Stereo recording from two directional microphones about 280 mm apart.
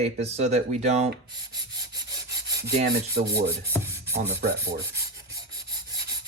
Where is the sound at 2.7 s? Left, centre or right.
Right.